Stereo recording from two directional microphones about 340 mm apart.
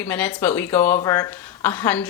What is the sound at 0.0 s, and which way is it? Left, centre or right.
Speech, centre.